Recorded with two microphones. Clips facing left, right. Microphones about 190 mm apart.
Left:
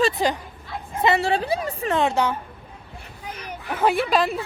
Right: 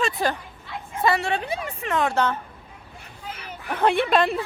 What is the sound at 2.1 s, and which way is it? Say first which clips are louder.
Speech: left 1 dB; 15° left (ahead or behind).